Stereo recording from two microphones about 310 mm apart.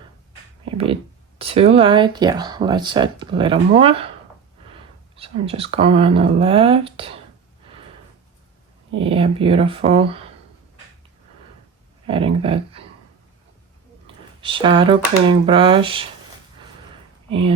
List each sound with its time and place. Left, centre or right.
1.4 s speech: centre
5.1 s speech: centre
9.0 s speech: centre
12.0 s speech: centre
14.4 s speech: centre
17.2 s speech: centre